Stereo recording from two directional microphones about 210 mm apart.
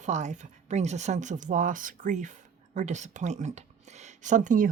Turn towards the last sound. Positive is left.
turn(degrees=-40)  # may be behind; listen again after turning